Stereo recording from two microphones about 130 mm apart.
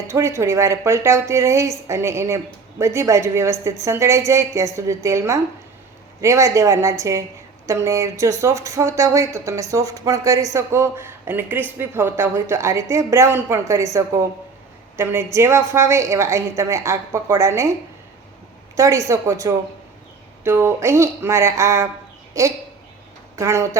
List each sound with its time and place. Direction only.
0.1 s speech: 20° right (ahead or behind)
18.8 s speech: 25° right (ahead or behind)